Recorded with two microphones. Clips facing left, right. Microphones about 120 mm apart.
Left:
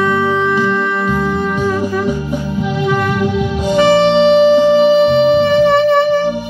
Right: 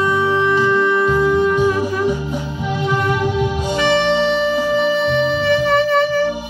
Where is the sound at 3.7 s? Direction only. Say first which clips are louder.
Left 7 dB; 40° left (ahead or behind).